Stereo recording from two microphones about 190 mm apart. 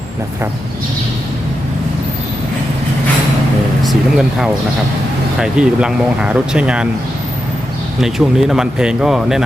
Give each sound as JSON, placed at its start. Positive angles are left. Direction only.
{"t": 3.8, "sound": "speech", "side_deg": 0}
{"t": 8.0, "sound": "speech", "side_deg": 0}